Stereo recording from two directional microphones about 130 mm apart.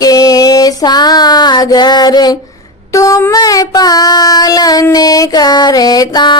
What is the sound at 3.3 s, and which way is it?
Child singing, 30° left (ahead or behind).